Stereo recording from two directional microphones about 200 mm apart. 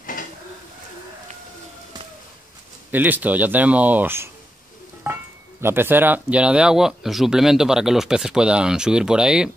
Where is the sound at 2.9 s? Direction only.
10° right (ahead or behind).